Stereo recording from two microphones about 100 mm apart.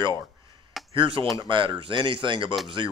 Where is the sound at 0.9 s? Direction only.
60° right (ahead or behind).